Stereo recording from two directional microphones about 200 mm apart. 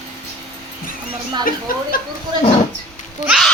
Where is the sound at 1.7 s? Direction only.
45° left (ahead or behind).